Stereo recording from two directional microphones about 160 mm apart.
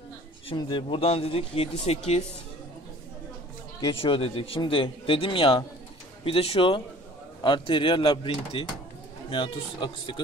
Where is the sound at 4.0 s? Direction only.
35° left (ahead or behind).